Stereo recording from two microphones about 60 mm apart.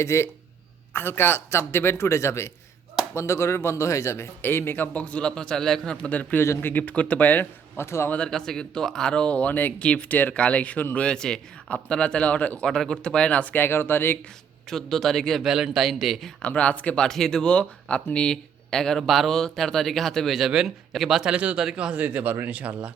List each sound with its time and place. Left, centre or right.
0.0 s speech: left
0.9 s speech: left
4.4 s speech: left
4.9 s speech: left
5.3 s speech: centre; by 7.4 s left
7.8 s speech: left
8.3 s speech: centre
12.6 s speech: centre; by 14.2 s left
14.7 s speech: centre
15.4 s speech: centre
16.4 s speech: left
17.0 s speech: centre
17.5 s a man's voice: centre
21.2 s speech: centre